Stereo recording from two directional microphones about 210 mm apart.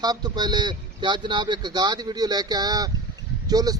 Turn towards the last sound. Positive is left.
turn(degrees=-20)  # may be behind; listen again after turning